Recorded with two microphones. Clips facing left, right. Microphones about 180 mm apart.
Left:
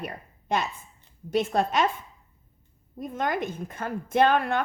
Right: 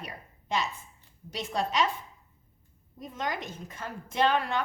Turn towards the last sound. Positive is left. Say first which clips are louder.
# left 5 dB
turn(degrees=55)  # may be behind; listen again after turning